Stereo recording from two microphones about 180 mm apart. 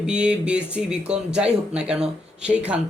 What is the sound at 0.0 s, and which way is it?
Speech, 5° right (ahead or behind).